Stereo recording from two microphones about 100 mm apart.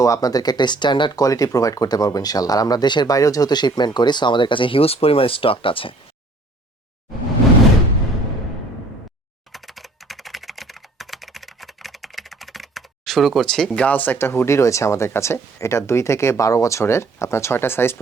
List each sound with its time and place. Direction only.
0.0 s speech: 35° left (ahead or behind)
1.2 s speech: 35° left (ahead or behind); by 5.9 s 65° left (ahead or behind)
9.5 s computer keyboard: centre (ahead or behind); by 18.0 s 25° left (ahead or behind)